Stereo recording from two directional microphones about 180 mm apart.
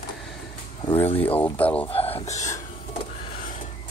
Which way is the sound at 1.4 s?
10° left (ahead or behind).